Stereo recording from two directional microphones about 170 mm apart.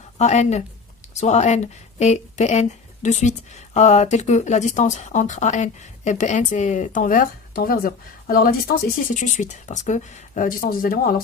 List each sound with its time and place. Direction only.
0.2 s speech: 40° left (ahead or behind); by 8.5 s 60° left (ahead or behind)
9.0 s speech: 50° left (ahead or behind)